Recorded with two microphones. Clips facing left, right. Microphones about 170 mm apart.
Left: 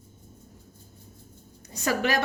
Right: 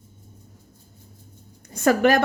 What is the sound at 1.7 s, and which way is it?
Speech, 55° right (ahead or behind).